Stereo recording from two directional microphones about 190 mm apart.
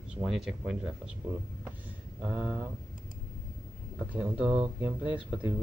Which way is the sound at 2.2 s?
10° right (ahead or behind).